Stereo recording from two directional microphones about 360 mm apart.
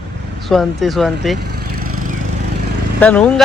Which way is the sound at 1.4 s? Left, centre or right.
Right.